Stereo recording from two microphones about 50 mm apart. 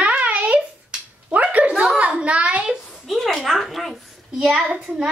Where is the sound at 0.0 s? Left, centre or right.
Right.